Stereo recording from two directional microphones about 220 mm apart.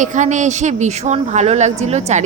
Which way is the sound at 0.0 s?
35° right (ahead or behind).